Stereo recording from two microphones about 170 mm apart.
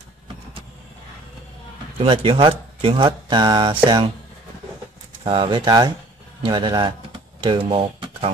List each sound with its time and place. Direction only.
2.0 s speech: 35° right (ahead or behind)
5.2 s speech: 30° right (ahead or behind)